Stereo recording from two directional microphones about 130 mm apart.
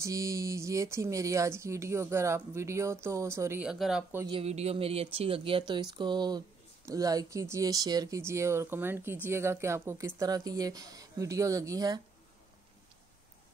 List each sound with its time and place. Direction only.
0.0 s speech: 25° right (ahead or behind)
3.6 s speech: centre (ahead or behind)
4.3 s a woman's voice: 50° right (ahead or behind); by 12.0 s 25° right (ahead or behind)